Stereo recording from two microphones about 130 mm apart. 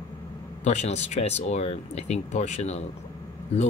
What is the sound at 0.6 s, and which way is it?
Speech, 60° left (ahead or behind).